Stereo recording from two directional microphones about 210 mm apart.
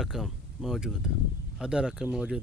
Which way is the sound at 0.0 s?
Centre (ahead or behind).